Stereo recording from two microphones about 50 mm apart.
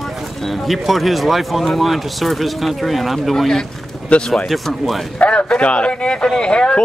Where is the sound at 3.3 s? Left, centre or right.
Centre.